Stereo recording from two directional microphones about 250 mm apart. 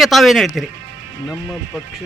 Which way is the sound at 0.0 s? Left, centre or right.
Centre.